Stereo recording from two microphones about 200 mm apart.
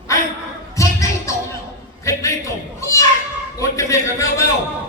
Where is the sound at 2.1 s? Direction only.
15° left (ahead or behind).